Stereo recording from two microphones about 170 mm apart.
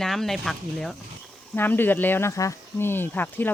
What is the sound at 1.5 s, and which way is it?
Speech, 10° left (ahead or behind).